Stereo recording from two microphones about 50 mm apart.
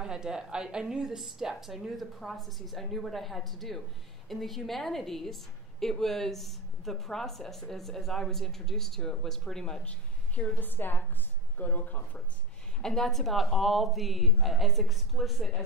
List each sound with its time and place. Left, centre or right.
0.0 s a woman's voice: centre
9.8 s a sound: left
10.6 s speech: left
12.8 s a woman's voice: centre